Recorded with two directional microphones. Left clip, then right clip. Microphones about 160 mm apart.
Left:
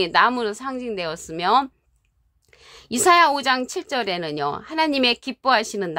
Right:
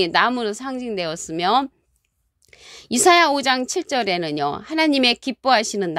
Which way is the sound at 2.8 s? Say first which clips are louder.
Right 1 dB; 35° right (ahead or behind).